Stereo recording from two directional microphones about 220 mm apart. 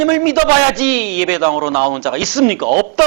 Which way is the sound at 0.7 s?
10° right (ahead or behind).